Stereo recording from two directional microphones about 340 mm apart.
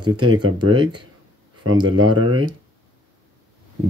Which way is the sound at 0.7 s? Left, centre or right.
Centre.